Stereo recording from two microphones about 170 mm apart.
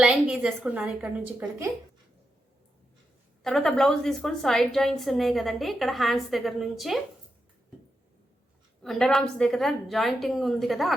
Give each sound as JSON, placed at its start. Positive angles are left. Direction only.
{"t": 0.0, "sound": "a woman's voice", "side_deg": -5}
{"t": 3.4, "sound": "a woman's voice", "side_deg": 5}
{"t": 8.8, "sound": "a woman's voice", "side_deg": 5}